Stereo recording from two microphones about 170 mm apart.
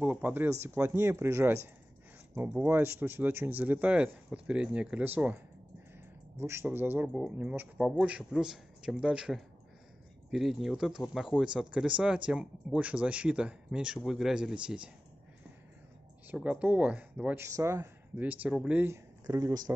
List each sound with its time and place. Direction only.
0.0 s speech: 10° right (ahead or behind)
6.4 s speech: 15° right (ahead or behind)
16.3 s speech: 10° right (ahead or behind)
19.2 s speech: 20° right (ahead or behind)